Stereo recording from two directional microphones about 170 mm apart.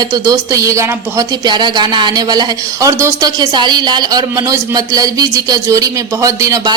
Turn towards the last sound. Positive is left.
turn(degrees=-20)  # may be behind; listen again after turning